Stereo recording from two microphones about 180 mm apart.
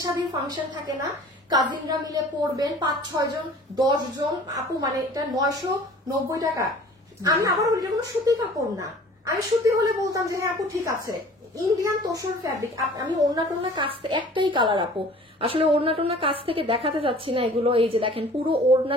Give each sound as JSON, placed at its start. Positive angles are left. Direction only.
{"t": 0.0, "sound": "a woman's voice", "side_deg": -20}